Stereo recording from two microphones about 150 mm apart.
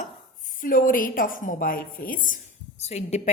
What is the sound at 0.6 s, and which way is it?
A woman's voice, 70° left (ahead or behind).